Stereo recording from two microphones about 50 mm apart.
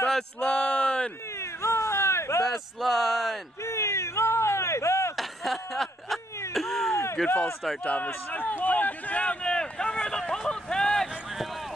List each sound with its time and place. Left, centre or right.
0.4 s speech: left
1.4 s a sound: left
2.4 s speech: centre
3.6 s chop: left
5.1 s a sound: centre
6.5 s cat: centre
6.9 s a sound: left
7.8 s a man's voice: left
8.3 s speech: left; by 11.1 s centre